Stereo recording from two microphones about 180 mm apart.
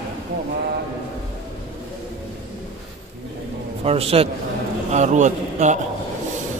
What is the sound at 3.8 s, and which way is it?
A man's voice, 35° right (ahead or behind).